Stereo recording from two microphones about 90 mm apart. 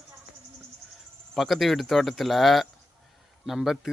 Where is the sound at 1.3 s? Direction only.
Centre (ahead or behind).